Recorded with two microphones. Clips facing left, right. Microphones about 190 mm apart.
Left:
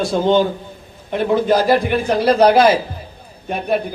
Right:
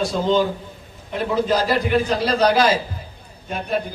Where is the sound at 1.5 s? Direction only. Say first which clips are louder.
Left 5 dB; 55° left (ahead or behind).